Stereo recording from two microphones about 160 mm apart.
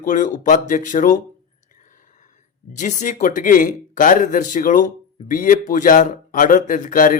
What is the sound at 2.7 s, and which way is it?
Speech, 50° left (ahead or behind).